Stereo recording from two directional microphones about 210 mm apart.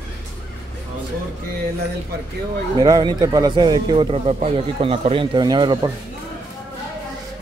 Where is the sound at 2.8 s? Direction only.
20° right (ahead or behind).